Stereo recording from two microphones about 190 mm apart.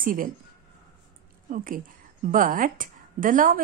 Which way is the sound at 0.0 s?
45° right (ahead or behind).